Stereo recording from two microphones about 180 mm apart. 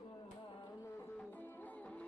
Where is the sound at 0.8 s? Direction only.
15° left (ahead or behind).